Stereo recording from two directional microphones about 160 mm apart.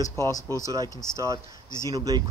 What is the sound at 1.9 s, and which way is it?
Speech, 20° right (ahead or behind).